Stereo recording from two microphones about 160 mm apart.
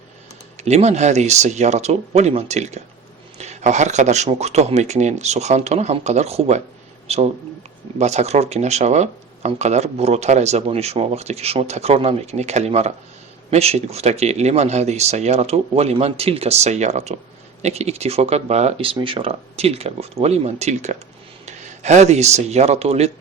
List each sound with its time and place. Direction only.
0.6 s speech: 45° right (ahead or behind)